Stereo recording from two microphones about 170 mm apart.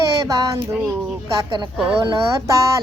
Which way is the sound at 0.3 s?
20° right (ahead or behind).